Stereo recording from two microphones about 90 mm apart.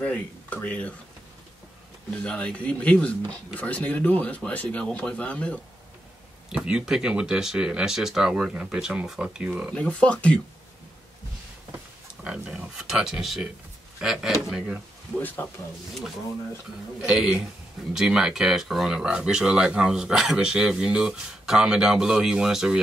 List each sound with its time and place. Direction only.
0.0 s speech: 15° left (ahead or behind)
2.2 s speech: 10° left (ahead or behind)
6.5 s speech: 10° right (ahead or behind)
9.5 s speech: 20° right (ahead or behind)
9.8 s speech: 15° left (ahead or behind)
12.2 s speech: 10° right (ahead or behind)
15.1 s speech: 20° left (ahead or behind)
17.0 s speech: 10° right (ahead or behind)